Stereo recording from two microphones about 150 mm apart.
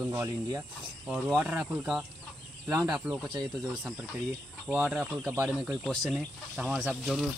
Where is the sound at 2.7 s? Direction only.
15° right (ahead or behind).